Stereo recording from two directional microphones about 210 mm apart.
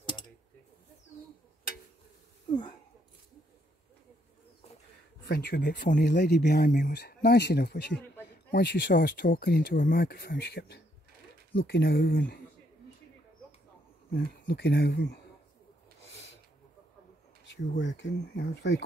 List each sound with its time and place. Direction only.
5.3 s speech: 50° left (ahead or behind)
14.1 s speech: 50° left (ahead or behind)
17.5 s speech: 55° left (ahead or behind)